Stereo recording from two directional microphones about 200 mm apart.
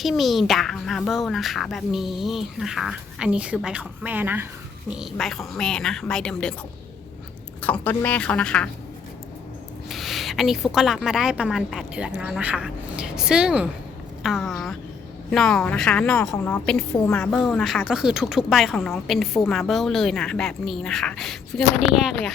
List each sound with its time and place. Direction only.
0.0 s a woman's voice: centre (ahead or behind)
7.6 s speech: 5° left (ahead or behind)
9.9 s a woman's voice: centre (ahead or behind)